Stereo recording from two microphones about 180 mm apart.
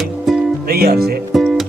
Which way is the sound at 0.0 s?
Centre (ahead or behind).